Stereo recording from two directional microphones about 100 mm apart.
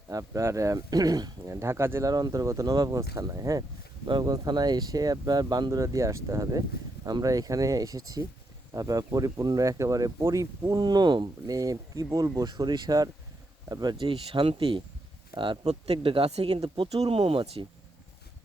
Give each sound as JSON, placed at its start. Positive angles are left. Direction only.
{"t": 0.1, "sound": "speech", "side_deg": -35}
{"t": 2.1, "sound": "speech", "side_deg": -40}
{"t": 4.0, "sound": "speech", "side_deg": -45}
{"t": 5.8, "sound": "speech", "side_deg": -30}
{"t": 14.0, "sound": "speech", "side_deg": -60}
{"t": 15.6, "sound": "speech", "side_deg": -90}
{"t": 17.1, "sound": "speech", "side_deg": -70}